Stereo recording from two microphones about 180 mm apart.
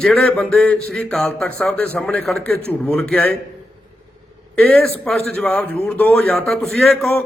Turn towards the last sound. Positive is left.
turn(degrees=0)  # may be behind; listen again after turning